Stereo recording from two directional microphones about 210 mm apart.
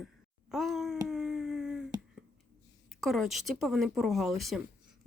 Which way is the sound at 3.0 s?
Centre (ahead or behind).